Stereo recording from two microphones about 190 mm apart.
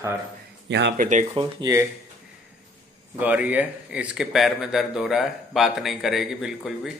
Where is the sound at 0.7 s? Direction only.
65° right (ahead or behind).